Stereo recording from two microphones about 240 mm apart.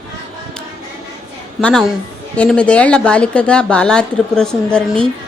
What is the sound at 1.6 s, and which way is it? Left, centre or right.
Speech, centre.